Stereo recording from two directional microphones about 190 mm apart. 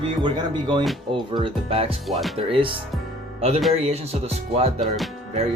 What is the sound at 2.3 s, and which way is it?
Speech, 30° right (ahead or behind).